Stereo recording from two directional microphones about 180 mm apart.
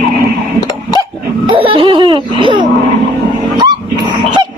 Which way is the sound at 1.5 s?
30° right (ahead or behind).